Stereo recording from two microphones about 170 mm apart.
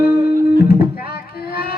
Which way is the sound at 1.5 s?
65° left (ahead or behind).